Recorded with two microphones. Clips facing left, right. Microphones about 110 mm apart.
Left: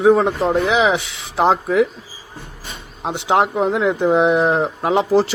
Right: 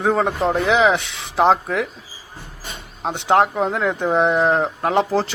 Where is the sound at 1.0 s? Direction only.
75° right (ahead or behind).